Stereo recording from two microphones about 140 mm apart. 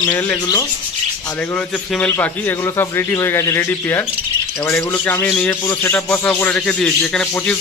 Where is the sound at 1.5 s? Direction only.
10° left (ahead or behind).